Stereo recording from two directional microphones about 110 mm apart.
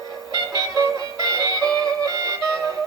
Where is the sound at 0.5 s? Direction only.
35° right (ahead or behind).